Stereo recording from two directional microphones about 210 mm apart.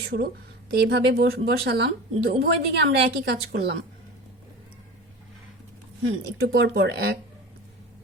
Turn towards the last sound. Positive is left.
turn(degrees=-55)  # may be behind; listen again after turning